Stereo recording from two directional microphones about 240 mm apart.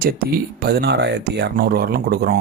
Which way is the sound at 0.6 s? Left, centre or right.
Right.